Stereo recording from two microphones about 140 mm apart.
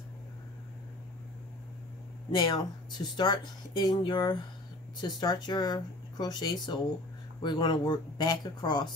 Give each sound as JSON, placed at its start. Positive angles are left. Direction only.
{"t": 2.3, "sound": "speech", "side_deg": 30}